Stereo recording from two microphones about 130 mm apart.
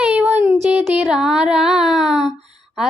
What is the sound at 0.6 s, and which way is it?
Music, 10° right (ahead or behind).